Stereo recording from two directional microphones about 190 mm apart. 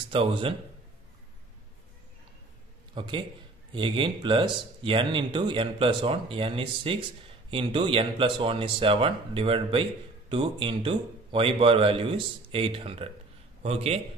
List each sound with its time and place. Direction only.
0.1 s speech: 25° right (ahead or behind)
2.9 s a man's voice: 25° right (ahead or behind)